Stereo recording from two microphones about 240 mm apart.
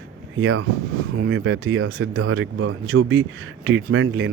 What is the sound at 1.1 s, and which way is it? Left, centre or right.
Speech, right.